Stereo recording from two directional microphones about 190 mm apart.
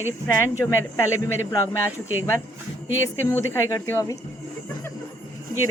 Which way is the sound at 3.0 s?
15° left (ahead or behind).